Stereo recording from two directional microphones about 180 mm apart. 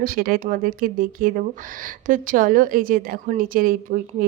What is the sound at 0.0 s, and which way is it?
Speech, 55° right (ahead or behind).